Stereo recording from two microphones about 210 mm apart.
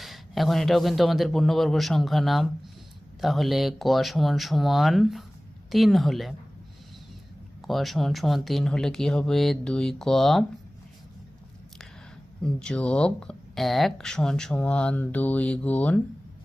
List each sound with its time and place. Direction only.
0.0 s speech: centre (ahead or behind)
7.7 s speech: centre (ahead or behind)
12.4 s speech: 5° left (ahead or behind)